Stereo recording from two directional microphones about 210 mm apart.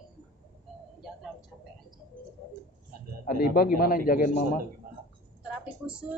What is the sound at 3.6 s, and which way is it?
Speech, 45° left (ahead or behind).